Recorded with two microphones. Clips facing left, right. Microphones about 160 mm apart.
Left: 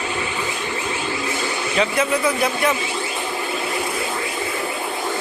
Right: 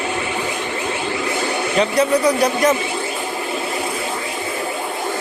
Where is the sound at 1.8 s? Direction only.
40° right (ahead or behind).